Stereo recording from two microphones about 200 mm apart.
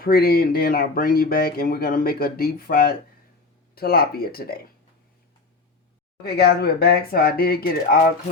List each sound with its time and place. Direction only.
0.0 s speech: 50° left (ahead or behind)
6.2 s speech: 55° left (ahead or behind)